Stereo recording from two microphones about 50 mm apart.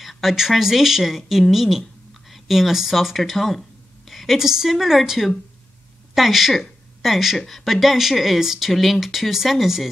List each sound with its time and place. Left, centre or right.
0.0 s a woman's voice: centre